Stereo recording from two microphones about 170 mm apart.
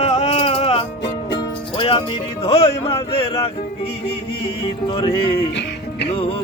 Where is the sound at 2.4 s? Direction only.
35° left (ahead or behind).